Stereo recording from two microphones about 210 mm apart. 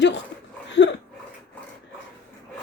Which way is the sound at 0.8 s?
55° left (ahead or behind).